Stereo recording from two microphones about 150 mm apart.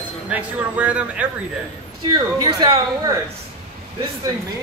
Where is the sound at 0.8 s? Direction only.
10° right (ahead or behind).